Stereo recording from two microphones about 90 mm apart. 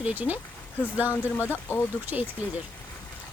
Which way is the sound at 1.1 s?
25° left (ahead or behind).